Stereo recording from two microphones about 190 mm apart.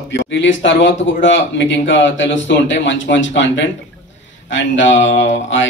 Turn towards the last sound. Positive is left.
turn(degrees=75)  # may be behind; listen again after turning